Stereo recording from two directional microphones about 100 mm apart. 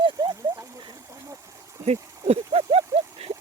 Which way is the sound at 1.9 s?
90° right.